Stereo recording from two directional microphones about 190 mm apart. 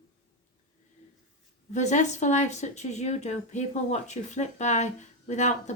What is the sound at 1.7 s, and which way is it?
Speech, 40° left (ahead or behind).